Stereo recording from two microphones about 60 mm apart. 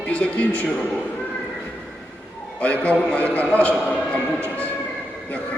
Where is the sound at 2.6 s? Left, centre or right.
Left.